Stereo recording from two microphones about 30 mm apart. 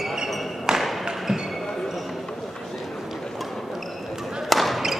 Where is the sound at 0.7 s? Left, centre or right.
Centre.